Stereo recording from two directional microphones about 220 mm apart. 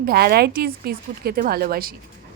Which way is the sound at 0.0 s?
45° right (ahead or behind).